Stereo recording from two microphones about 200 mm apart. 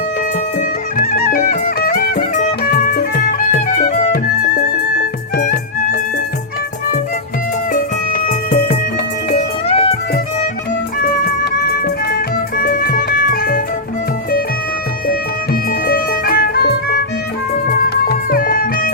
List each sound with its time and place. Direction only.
0.9 s music: 45° left (ahead or behind)
7.7 s music: 45° left (ahead or behind)
9.3 s music: 30° left (ahead or behind)
11.0 s music: 50° left (ahead or behind)
15.9 s music: 50° left (ahead or behind)